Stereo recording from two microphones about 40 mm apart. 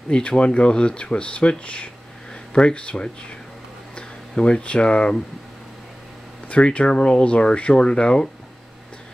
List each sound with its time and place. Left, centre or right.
0.1 s speech: left
6.5 s speech: left